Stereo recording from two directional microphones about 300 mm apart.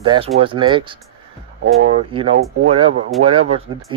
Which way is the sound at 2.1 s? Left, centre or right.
Centre.